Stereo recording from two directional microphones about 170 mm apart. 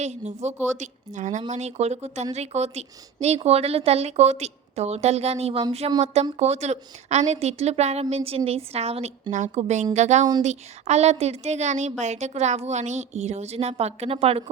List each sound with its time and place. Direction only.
0.0 s a woman's voice: 40° right (ahead or behind)